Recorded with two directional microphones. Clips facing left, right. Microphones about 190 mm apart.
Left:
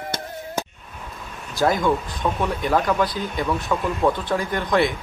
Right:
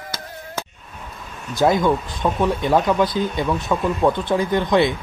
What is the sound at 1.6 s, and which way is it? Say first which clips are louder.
Speech: right 3 dB; 20° right (ahead or behind).